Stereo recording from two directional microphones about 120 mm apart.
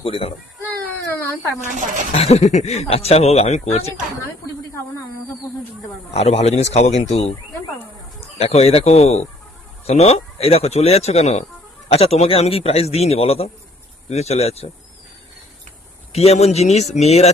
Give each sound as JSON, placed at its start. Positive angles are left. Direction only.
{"t": 0.0, "sound": "a child's voice", "side_deg": 50}
{"t": 1.2, "sound": "a sound", "side_deg": 20}
{"t": 1.6, "sound": "speech", "side_deg": -90}
{"t": 2.1, "sound": "speech", "side_deg": 60}
{"t": 6.1, "sound": "speech", "side_deg": 60}
{"t": 8.4, "sound": "speech", "side_deg": 60}
{"t": 16.1, "sound": "speech", "side_deg": 60}